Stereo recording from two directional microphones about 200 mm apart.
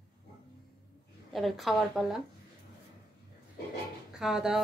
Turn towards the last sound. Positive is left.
turn(degrees=-5)  # may be behind; listen again after turning